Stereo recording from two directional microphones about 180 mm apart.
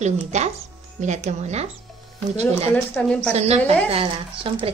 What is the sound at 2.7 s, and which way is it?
Speech, 5° left (ahead or behind).